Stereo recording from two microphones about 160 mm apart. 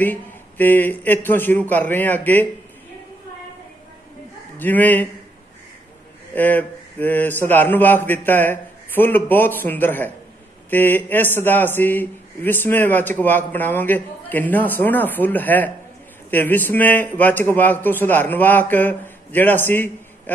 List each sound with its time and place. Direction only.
0.0 s a man's voice: 10° left (ahead or behind)
4.6 s a man's voice: 10° left (ahead or behind)
6.3 s a man's voice: 10° left (ahead or behind)